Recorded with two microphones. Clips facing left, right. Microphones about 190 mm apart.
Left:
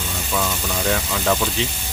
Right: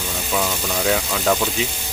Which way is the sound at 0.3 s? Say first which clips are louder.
Right 1 dB; 10° right (ahead or behind).